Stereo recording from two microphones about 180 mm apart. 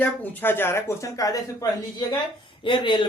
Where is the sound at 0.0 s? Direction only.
10° left (ahead or behind).